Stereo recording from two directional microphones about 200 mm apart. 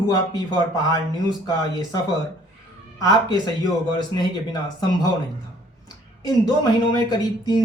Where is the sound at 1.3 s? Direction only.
20° left (ahead or behind).